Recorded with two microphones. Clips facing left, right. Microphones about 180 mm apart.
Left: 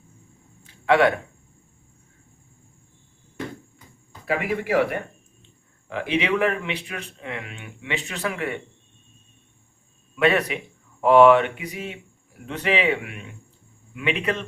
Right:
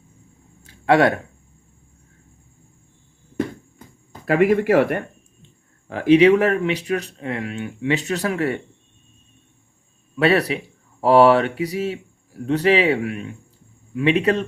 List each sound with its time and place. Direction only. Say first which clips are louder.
0.6 s a sound: right 2 dB; 40° right (ahead or behind)
4.3 s speech: right 8 dB; 50° right (ahead or behind)
5.9 s speech: right 11 dB; 40° right (ahead or behind)
10.2 s speech: right 3 dB; 35° right (ahead or behind)